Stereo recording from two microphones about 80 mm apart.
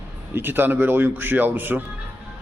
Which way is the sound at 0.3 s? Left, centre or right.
Right.